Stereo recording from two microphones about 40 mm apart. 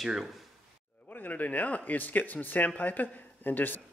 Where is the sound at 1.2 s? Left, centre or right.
Left.